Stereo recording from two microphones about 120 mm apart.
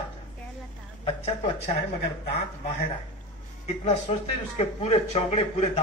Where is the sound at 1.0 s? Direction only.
50° left (ahead or behind).